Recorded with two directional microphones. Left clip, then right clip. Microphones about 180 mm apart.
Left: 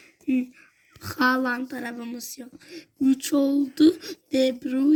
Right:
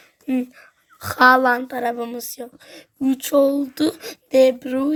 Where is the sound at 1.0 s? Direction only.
50° right (ahead or behind).